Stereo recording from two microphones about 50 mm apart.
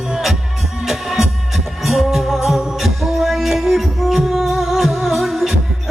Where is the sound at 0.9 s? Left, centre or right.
Centre.